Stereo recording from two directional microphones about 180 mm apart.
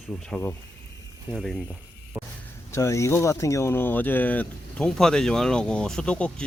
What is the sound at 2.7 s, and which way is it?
Speech, 15° left (ahead or behind).